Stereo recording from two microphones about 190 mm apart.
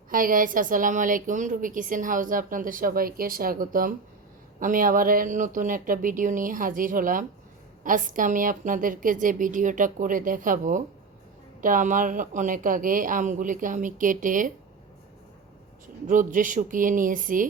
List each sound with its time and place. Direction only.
0.1 s a woman's voice: 45° right (ahead or behind)
16.0 s a woman's voice: 45° right (ahead or behind)